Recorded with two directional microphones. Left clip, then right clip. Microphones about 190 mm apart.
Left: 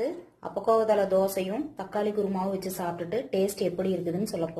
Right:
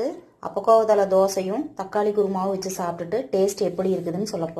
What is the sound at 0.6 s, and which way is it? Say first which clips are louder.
A woman's voice: right 6 dB; centre (ahead or behind).